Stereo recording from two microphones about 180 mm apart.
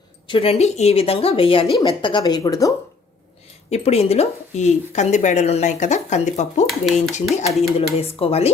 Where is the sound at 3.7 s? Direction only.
35° left (ahead or behind).